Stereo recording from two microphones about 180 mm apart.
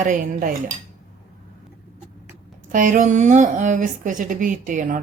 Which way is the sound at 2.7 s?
45° right (ahead or behind).